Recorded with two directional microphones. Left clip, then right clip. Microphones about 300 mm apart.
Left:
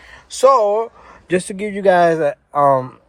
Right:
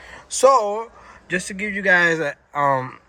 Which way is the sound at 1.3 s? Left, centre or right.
Centre.